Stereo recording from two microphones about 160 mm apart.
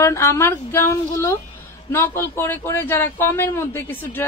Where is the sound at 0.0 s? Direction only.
20° left (ahead or behind).